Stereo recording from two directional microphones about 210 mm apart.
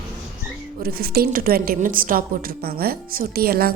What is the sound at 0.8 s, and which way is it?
A woman's voice, 45° right (ahead or behind).